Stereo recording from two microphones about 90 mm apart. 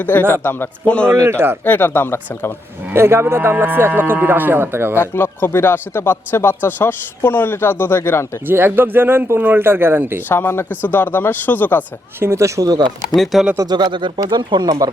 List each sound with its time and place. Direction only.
0.0 s a man's voice: 20° left (ahead or behind)
1.2 s speech: 25° right (ahead or behind)
1.6 s speech: 20° left (ahead or behind)
2.9 s speech: 30° right (ahead or behind)
4.9 s speech: 25° left (ahead or behind)
8.4 s speech: 25° right (ahead or behind)
10.2 s speech: 25° left (ahead or behind)
12.2 s speech: 30° right (ahead or behind)
13.1 s speech: centre (ahead or behind)
13.7 s speech: 50° right (ahead or behind)